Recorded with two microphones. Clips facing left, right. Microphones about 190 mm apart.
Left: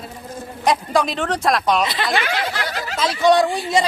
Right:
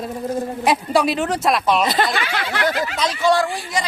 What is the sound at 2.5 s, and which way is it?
Snicker, 55° right (ahead or behind).